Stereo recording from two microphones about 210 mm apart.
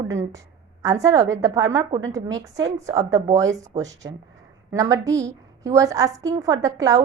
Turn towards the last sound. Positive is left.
turn(degrees=-15)  # may be behind; listen again after turning